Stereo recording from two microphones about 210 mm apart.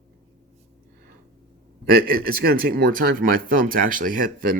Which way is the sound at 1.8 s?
45° right (ahead or behind).